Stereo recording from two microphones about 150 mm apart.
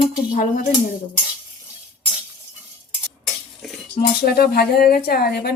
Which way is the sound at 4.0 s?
90° left.